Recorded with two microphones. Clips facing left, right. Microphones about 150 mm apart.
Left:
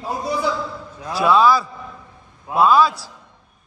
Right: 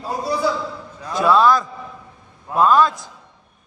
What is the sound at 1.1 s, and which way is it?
A man's voice, 5° left (ahead or behind).